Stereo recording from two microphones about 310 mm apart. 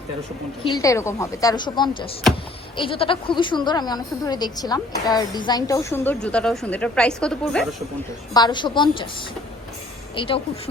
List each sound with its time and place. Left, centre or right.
0.6 s speech: centre
8.3 s speech: centre
10.2 s speech: centre